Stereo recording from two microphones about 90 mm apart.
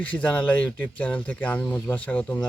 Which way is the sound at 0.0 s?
15° left (ahead or behind).